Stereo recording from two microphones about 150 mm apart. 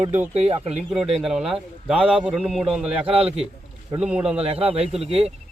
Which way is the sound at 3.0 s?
40° right (ahead or behind).